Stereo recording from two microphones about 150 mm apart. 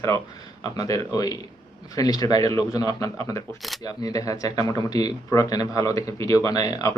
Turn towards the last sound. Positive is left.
turn(degrees=25)  # may be behind; listen again after turning